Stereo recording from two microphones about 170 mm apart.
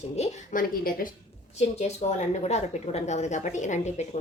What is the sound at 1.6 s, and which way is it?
A woman's voice, 40° left (ahead or behind).